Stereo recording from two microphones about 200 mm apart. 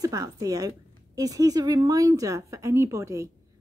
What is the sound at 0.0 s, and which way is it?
A woman's voice, 20° right (ahead or behind).